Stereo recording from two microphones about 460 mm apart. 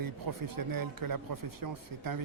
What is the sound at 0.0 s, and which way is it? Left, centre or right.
Speech, right.